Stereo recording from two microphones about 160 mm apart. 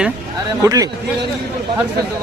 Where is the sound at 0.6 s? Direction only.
20° right (ahead or behind).